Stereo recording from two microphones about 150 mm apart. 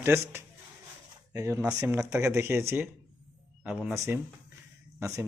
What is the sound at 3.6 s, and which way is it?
Speech, 5° right (ahead or behind).